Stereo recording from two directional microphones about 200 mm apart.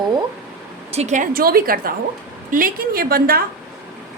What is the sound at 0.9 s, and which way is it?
A woman's voice, 35° right (ahead or behind).